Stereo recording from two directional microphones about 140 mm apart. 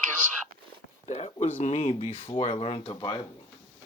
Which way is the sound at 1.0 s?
50° left (ahead or behind).